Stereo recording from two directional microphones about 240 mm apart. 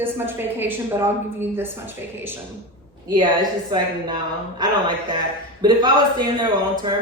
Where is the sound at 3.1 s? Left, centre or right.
Centre.